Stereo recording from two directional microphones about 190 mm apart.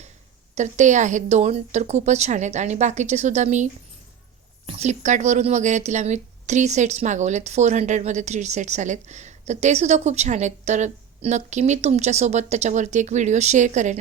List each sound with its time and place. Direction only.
0.5 s speech: 40° right (ahead or behind)